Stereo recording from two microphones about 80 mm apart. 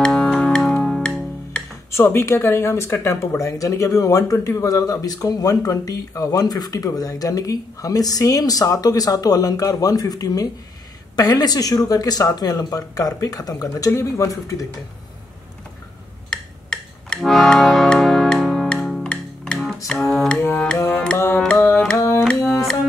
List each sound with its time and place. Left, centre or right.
0.0 s music: centre
1.9 s speech: left
3.3 s speech: left
16.3 s a sound: centre
17.2 s music: centre
19.0 s music: centre
21.5 s speech: left
21.9 s music: left
22.5 s music: centre